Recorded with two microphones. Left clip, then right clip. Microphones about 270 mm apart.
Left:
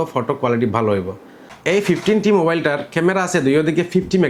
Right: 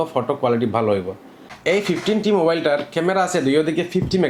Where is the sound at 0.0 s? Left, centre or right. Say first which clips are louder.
Even; left.